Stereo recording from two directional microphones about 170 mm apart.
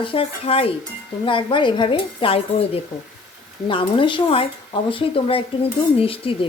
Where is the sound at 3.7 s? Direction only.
30° left (ahead or behind).